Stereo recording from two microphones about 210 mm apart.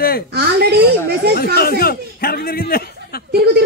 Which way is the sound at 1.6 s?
45° left (ahead or behind).